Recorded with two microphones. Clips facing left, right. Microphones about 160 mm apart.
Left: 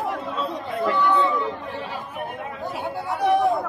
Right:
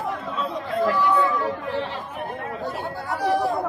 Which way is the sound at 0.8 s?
Centre (ahead or behind).